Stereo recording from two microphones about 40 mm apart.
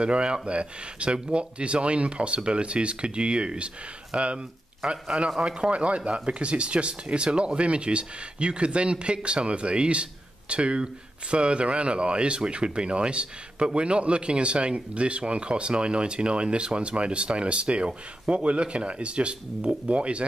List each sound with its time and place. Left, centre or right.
0.0 s speech: right